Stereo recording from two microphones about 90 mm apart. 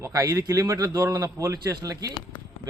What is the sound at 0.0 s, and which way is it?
A man's voice, 35° right (ahead or behind).